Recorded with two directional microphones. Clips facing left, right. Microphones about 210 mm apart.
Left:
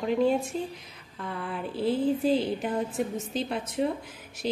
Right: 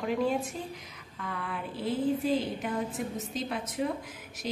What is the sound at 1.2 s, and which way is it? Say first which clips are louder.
Speech: left 3 dB; 30° left (ahead or behind).